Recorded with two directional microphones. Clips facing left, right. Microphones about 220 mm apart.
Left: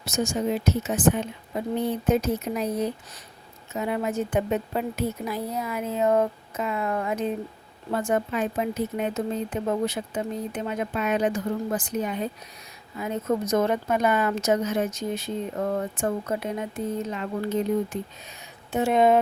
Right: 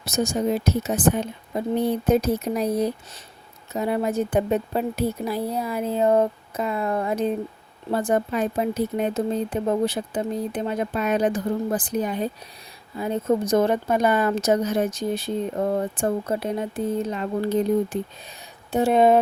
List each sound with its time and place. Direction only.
0.0 s speech: 35° right (ahead or behind)